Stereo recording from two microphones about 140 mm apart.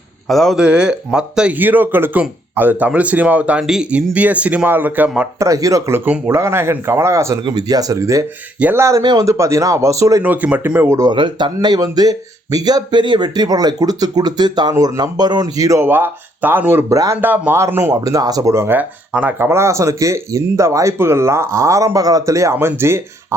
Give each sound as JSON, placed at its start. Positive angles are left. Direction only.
{"t": 0.3, "sound": "speech", "side_deg": 0}
{"t": 5.4, "sound": "speech", "side_deg": -25}
{"t": 10.2, "sound": "speech", "side_deg": -10}